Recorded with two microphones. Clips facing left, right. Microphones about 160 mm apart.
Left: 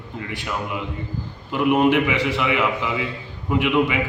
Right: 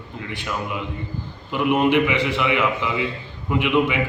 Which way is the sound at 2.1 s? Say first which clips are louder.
Even; 40° left (ahead or behind).